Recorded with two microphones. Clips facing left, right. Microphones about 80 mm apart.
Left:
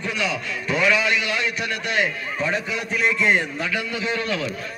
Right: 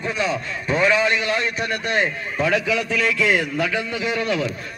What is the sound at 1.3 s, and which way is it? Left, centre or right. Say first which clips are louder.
Speech: right 2 dB; centre.